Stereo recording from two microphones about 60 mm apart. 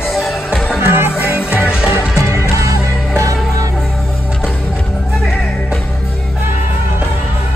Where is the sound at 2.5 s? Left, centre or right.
Right.